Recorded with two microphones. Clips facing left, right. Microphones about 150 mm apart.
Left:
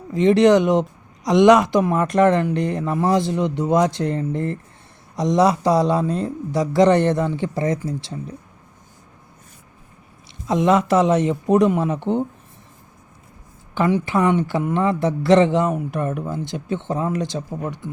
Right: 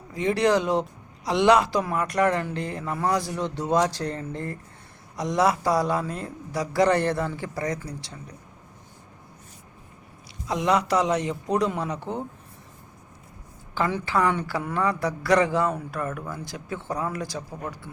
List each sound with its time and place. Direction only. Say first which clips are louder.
0.1 s speech: left 8 dB; 25° left (ahead or behind)
10.4 s speech: left 6 dB; 20° left (ahead or behind)
13.7 s speech: left 6 dB; 20° left (ahead or behind)